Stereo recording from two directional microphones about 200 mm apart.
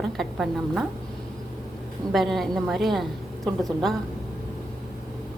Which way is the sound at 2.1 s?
Centre (ahead or behind).